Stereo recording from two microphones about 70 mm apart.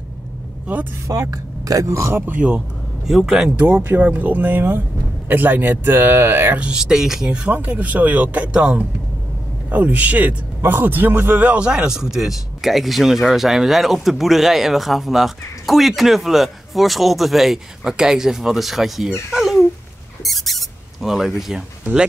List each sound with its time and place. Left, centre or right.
1.3 s speech: right
3.1 s a man's voice: centre
3.8 s speech: right
6.6 s speech: centre
7.2 s a man's voice: centre
19.3 s a sound: centre
20.2 s speech: centre